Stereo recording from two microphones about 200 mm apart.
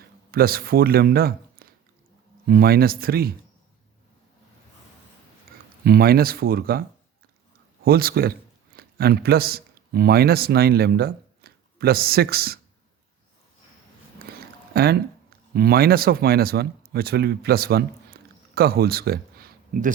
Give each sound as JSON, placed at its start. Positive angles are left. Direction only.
{"t": 0.3, "sound": "speech", "side_deg": -50}
{"t": 5.8, "sound": "speech", "side_deg": -50}
{"t": 7.9, "sound": "a man's voice", "side_deg": -50}
{"t": 14.7, "sound": "speech", "side_deg": -50}